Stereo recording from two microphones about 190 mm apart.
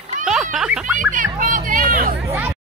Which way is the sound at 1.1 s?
45° right (ahead or behind).